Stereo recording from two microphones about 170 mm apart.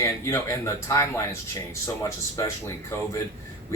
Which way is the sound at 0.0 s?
15° left (ahead or behind).